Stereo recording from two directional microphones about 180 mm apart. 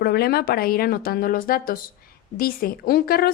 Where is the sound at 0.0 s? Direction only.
60° left (ahead or behind).